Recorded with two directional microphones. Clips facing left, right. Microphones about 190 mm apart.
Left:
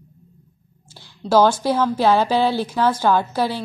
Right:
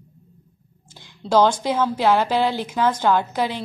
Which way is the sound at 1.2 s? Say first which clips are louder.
Left 2 dB; 5° left (ahead or behind).